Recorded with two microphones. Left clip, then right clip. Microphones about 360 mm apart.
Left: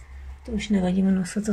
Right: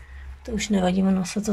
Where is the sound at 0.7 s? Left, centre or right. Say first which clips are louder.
Right 2 dB; right.